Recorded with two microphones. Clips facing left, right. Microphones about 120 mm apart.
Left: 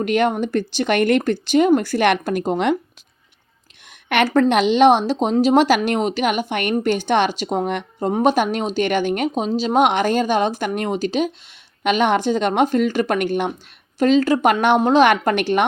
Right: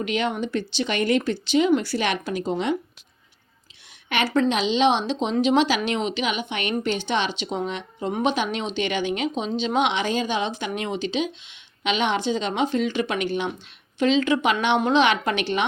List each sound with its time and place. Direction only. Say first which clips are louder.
0.0 s speech: left 6 dB; 50° left (ahead or behind)
4.1 s speech: left 6 dB; 50° left (ahead or behind)
7.9 s speech: left 6 dB; 40° left (ahead or behind)